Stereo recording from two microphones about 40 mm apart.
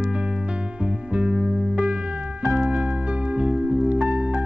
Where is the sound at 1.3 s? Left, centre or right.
Centre.